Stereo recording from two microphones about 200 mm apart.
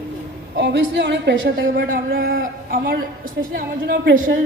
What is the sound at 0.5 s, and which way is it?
A woman's voice, 60° right (ahead or behind).